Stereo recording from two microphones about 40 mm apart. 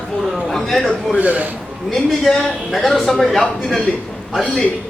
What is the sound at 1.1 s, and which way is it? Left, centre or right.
Speech, right.